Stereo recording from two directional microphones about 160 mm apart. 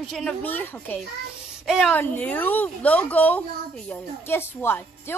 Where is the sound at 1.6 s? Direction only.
Centre (ahead or behind).